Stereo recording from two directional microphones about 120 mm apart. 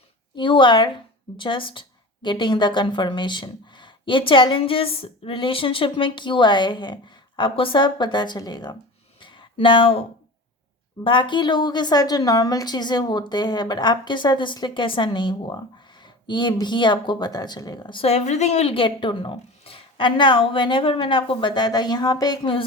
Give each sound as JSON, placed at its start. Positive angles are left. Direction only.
{"t": 0.3, "sound": "a woman's voice", "side_deg": 45}
{"t": 9.2, "sound": "a sound", "side_deg": 40}
{"t": 11.0, "sound": "a woman's voice", "side_deg": 40}